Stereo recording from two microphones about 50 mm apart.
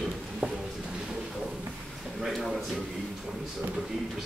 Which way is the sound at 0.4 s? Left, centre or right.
Right.